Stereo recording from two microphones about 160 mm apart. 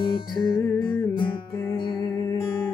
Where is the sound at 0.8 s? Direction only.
10° left (ahead or behind).